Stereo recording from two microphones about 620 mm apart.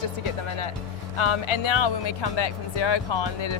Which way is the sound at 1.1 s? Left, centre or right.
Left.